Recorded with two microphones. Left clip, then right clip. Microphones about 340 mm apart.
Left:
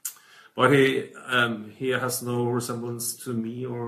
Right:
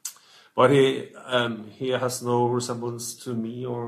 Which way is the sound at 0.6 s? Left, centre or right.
Centre.